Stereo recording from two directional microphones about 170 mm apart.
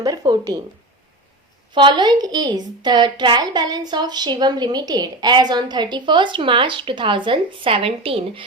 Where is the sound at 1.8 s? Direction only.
25° right (ahead or behind).